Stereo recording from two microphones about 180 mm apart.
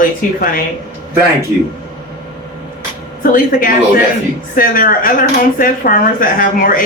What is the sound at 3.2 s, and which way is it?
A man's voice, 50° left (ahead or behind).